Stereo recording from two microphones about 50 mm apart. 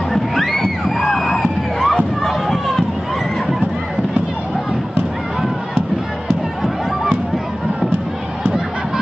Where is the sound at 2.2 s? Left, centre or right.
Centre.